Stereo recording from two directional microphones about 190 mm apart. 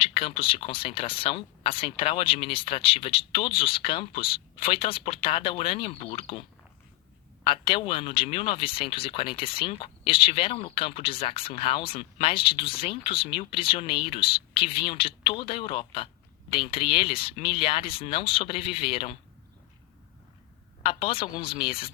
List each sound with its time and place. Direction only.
0.0 s speech: 30° left (ahead or behind)
7.4 s speech: 30° left (ahead or behind)
20.8 s speech: 30° left (ahead or behind)